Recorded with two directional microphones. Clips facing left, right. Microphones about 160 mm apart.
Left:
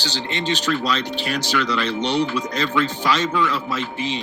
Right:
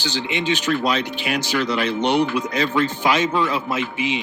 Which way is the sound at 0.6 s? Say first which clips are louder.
Right 2 dB; 55° right (ahead or behind).